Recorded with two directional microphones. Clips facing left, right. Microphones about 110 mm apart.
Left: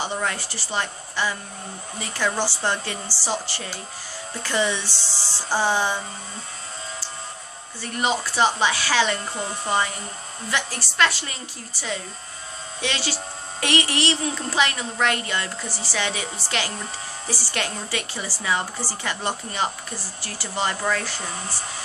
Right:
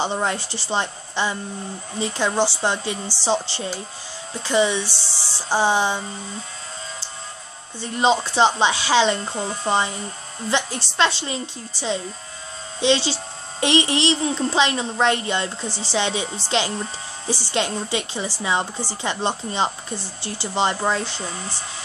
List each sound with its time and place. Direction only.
0.0 s a child's voice: 25° right (ahead or behind)
7.8 s a child's voice: 25° right (ahead or behind)